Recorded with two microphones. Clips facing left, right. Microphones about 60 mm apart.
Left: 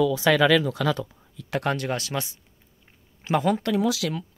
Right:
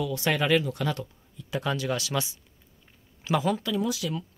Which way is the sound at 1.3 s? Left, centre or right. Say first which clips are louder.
Left 4 dB; left.